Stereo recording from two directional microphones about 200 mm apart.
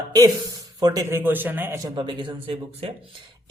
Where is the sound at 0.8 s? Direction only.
20° right (ahead or behind).